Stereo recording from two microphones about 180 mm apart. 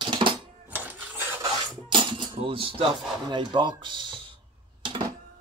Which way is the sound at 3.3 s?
25° right (ahead or behind).